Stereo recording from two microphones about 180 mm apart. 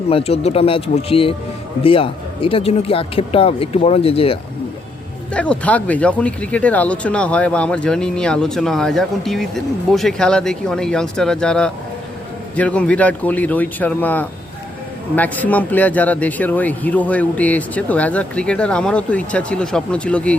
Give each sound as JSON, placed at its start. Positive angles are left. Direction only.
{"t": 0.1, "sound": "speech", "side_deg": 30}
{"t": 5.3, "sound": "speech", "side_deg": 5}